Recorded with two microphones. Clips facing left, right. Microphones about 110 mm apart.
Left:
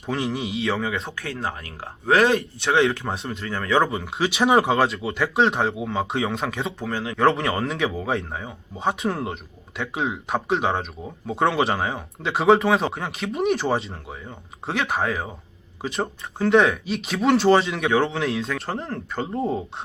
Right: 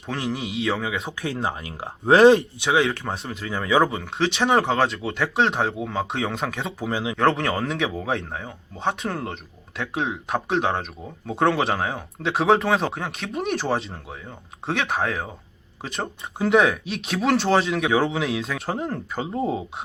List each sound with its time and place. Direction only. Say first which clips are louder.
0.0 s speech: left 2 dB; centre (ahead or behind)
1.1 s speech: right 3 dB; 20° right (ahead or behind)
2.6 s speech: left 2 dB; centre (ahead or behind)